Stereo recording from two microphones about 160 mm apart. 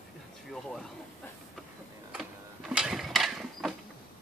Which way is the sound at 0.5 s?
Centre (ahead or behind).